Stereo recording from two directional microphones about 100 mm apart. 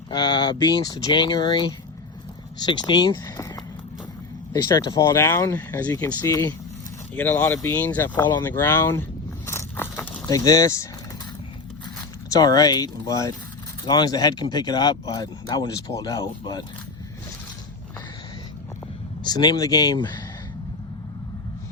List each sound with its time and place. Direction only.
0.1 s speech: 45° left (ahead or behind)
4.5 s speech: 40° left (ahead or behind)
7.2 s speech: 15° left (ahead or behind)
9.5 s biting: 25° left (ahead or behind)
10.2 s speech: 35° left (ahead or behind)
12.3 s speech: 40° left (ahead or behind)
16.4 s speech: 45° left (ahead or behind)
19.2 s speech: 45° left (ahead or behind)